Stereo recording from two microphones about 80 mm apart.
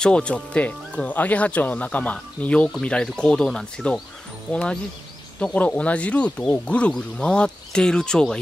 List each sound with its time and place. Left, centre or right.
0.0 s speech: centre